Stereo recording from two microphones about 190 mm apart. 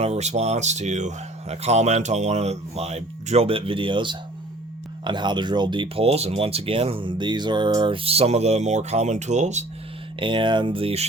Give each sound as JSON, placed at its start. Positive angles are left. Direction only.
{"t": 0.0, "sound": "speech", "side_deg": -35}
{"t": 10.2, "sound": "speech", "side_deg": -25}